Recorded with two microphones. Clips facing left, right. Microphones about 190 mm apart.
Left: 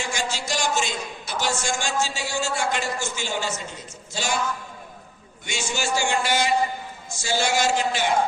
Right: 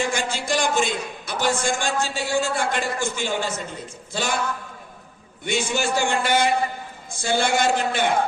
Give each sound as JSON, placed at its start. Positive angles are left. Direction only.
{"t": 0.0, "sound": "a man's voice", "side_deg": -55}
{"t": 5.5, "sound": "a man's voice", "side_deg": -55}